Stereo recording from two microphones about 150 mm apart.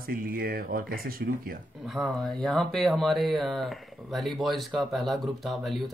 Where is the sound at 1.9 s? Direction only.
Centre (ahead or behind).